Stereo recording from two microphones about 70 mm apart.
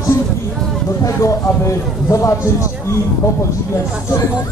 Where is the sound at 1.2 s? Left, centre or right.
Left.